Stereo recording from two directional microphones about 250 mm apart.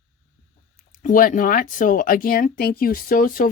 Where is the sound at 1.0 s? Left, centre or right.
Left.